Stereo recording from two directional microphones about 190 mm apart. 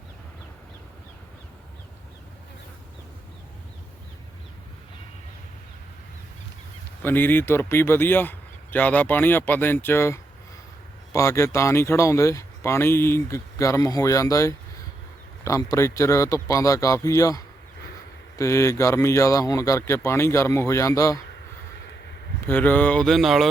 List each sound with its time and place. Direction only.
7.0 s speech: 10° left (ahead or behind)
22.4 s speech: 10° left (ahead or behind)